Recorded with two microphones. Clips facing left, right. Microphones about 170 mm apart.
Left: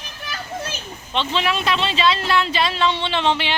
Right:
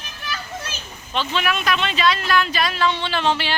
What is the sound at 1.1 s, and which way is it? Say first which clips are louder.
Speech: left 1 dB; 25° left (ahead or behind).